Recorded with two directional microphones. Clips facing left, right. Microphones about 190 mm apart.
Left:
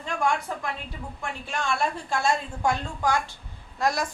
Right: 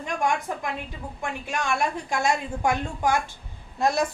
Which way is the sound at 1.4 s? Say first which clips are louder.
Right 1 dB; 15° right (ahead or behind).